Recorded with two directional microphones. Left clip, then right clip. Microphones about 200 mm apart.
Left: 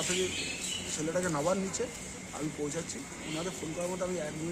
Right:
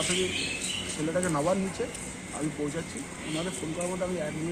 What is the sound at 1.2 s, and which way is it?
Speech, 20° left (ahead or behind).